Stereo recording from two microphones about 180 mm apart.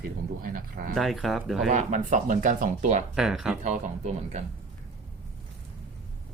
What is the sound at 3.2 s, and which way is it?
Speech, centre (ahead or behind).